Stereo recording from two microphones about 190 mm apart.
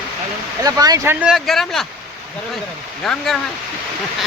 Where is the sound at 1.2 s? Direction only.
Centre (ahead or behind).